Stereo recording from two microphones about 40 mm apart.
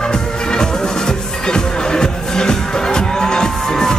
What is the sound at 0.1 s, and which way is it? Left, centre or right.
Music, centre.